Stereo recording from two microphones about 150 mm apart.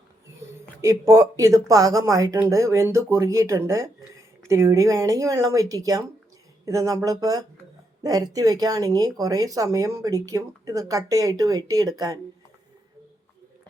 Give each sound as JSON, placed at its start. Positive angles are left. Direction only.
{"t": 0.8, "sound": "speech", "side_deg": -20}